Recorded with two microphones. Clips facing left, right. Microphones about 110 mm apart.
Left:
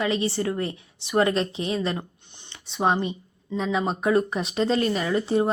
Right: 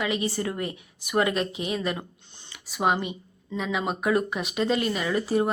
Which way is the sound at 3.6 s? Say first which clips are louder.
Left 3 dB; 30° left (ahead or behind).